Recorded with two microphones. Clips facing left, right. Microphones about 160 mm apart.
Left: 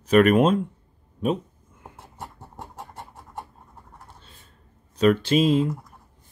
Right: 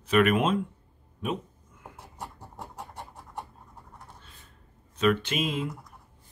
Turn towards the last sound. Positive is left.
turn(degrees=30)  # may be behind; listen again after turning